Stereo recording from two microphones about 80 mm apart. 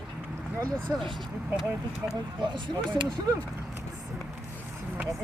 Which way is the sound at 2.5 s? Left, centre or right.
Right.